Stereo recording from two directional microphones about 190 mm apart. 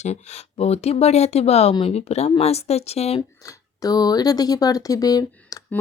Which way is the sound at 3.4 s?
20° left (ahead or behind).